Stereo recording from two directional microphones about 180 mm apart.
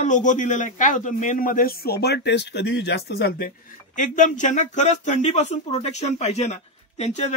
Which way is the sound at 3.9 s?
45° left (ahead or behind).